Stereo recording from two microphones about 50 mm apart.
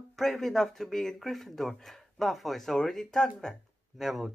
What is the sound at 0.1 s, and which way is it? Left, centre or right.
Speech, centre.